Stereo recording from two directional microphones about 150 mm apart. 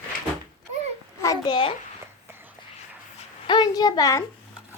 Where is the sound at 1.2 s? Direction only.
25° left (ahead or behind).